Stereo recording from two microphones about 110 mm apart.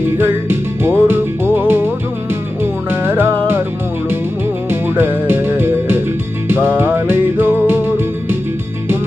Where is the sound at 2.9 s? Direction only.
15° right (ahead or behind).